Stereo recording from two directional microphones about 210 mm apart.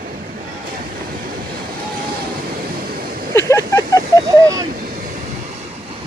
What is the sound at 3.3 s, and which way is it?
Vehicle, 15° left (ahead or behind).